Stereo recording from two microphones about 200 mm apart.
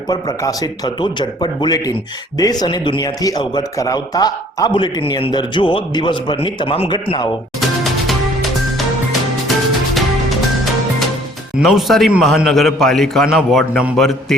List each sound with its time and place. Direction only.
0.1 s speech: 20° left (ahead or behind)
11.6 s a man's voice: centre (ahead or behind)